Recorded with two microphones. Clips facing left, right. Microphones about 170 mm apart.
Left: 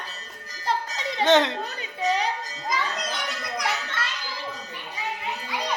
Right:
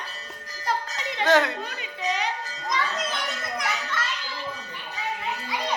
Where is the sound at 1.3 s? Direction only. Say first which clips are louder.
Left 1 dB; 25° left (ahead or behind).